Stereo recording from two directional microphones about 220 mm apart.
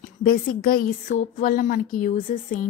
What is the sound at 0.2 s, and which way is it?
Speech, 40° left (ahead or behind).